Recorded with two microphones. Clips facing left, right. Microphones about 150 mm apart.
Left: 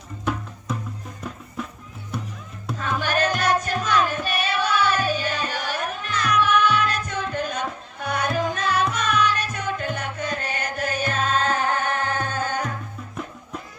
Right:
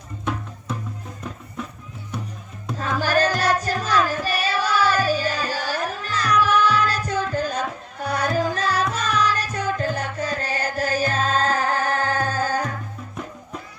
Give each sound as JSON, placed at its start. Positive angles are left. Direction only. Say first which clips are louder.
{"t": 3.0, "sound": "music", "louder": "right 3 dB", "side_deg": -35}